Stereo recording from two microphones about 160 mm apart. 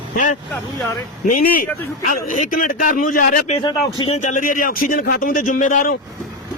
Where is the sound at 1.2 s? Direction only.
55° left (ahead or behind).